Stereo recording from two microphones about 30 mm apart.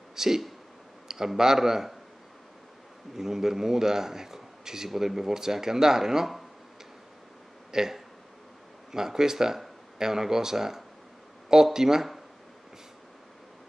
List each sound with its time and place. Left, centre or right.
0.1 s a man's voice: centre
3.2 s a man's voice: centre
7.7 s a man's voice: centre